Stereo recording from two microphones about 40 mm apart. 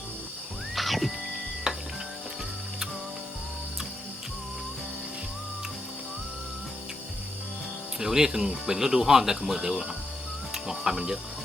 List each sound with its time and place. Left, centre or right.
0.8 s music: centre
1.7 s music: centre
7.9 s speech: centre
10.5 s cricket: centre